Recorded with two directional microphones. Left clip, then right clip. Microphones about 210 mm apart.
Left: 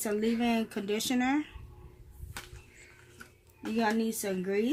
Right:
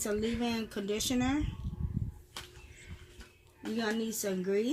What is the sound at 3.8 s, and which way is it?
Speech, 35° left (ahead or behind).